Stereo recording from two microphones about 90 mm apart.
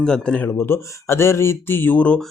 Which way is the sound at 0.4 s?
25° left (ahead or behind).